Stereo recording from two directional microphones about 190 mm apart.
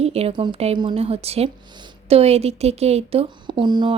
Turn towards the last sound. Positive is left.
turn(degrees=-25)  # may be behind; listen again after turning